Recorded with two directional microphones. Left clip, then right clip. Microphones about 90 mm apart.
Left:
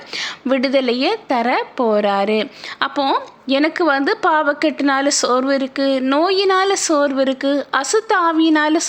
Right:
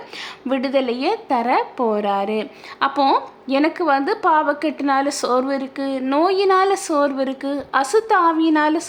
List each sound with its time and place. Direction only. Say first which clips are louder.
0.2 s a woman's voice: left 5 dB; 25° left (ahead or behind)
1.0 s a woman's voice: left 2 dB; 15° left (ahead or behind); by 8.9 s 30° left (ahead or behind)